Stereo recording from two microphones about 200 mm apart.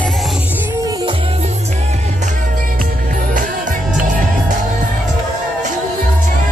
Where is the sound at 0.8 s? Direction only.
20° right (ahead or behind).